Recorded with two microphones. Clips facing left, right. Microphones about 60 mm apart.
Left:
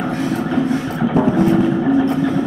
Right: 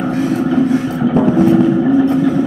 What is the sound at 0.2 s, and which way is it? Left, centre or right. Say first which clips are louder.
Vehicle: right 6 dB; centre.